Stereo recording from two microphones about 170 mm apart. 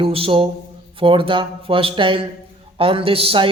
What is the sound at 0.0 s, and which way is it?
A man's voice, 30° right (ahead or behind).